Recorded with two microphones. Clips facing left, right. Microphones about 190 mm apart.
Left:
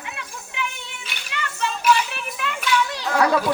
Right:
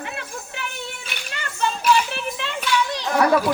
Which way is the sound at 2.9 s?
15° right (ahead or behind).